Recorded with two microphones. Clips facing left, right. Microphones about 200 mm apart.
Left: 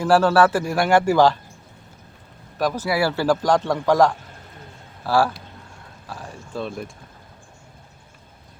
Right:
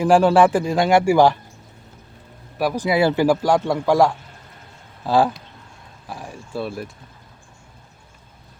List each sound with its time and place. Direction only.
0.0 s a man's voice: 15° right (ahead or behind)
2.6 s a man's voice: 10° right (ahead or behind)